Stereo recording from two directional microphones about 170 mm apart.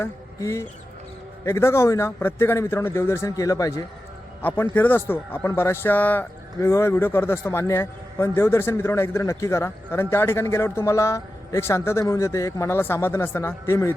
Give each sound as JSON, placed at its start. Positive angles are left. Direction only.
{"t": 0.0, "sound": "a man's voice", "side_deg": 20}